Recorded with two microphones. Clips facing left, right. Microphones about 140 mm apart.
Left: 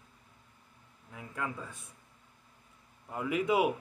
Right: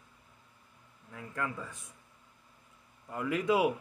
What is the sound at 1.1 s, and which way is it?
Speech, 15° left (ahead or behind).